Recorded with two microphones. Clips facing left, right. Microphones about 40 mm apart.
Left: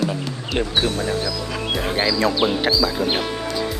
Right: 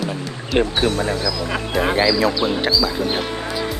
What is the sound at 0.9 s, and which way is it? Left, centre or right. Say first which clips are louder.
Speech: right 2 dB; right.